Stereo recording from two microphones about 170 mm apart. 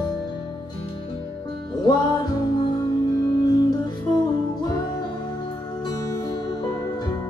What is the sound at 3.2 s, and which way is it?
Music, 25° left (ahead or behind).